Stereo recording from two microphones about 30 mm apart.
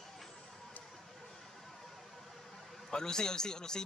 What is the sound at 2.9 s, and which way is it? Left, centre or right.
Speech, left.